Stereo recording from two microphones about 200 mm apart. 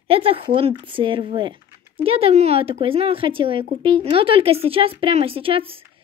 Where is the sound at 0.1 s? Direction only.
30° right (ahead or behind).